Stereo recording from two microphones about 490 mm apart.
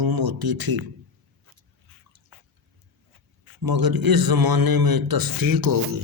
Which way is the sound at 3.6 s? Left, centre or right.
Right.